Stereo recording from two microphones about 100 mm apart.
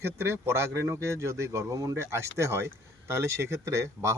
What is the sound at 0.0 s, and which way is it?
Speech, 25° right (ahead or behind).